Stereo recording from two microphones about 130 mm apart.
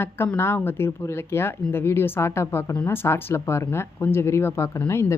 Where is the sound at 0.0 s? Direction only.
15° left (ahead or behind).